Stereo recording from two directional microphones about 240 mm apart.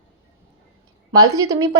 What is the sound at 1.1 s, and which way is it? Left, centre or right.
Speech, right.